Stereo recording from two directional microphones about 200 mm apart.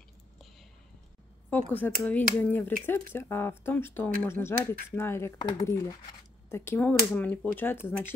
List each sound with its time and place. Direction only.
1.5 s speech: 10° left (ahead or behind)